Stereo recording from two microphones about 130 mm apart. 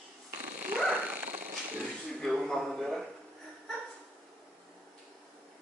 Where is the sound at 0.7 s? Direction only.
10° right (ahead or behind).